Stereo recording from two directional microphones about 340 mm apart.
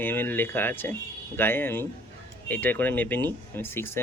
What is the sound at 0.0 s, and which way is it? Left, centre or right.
Speech, centre.